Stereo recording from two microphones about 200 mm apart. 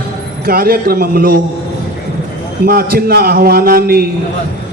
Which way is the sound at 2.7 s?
50° right (ahead or behind).